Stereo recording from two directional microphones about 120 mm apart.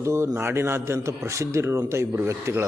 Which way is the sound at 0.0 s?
25° right (ahead or behind).